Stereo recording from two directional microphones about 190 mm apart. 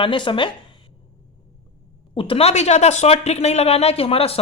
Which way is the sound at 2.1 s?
30° left (ahead or behind).